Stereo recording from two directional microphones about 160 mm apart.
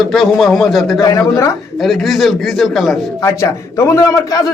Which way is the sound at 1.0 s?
20° left (ahead or behind).